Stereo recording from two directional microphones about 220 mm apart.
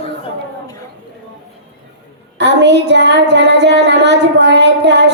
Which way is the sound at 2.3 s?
50° right (ahead or behind).